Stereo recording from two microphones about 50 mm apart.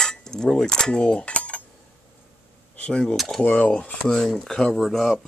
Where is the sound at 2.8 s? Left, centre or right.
Left.